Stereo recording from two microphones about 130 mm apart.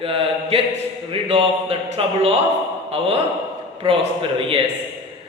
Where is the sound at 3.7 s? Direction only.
45° right (ahead or behind).